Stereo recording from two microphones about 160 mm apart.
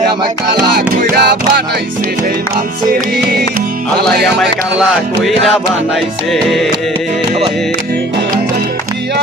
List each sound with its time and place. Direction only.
0.8 s music: 80° right
4.0 s music: centre (ahead or behind)